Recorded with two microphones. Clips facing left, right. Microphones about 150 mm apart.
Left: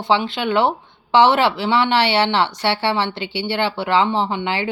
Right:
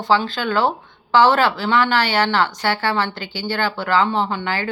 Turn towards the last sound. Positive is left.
turn(degrees=20)  # may be behind; listen again after turning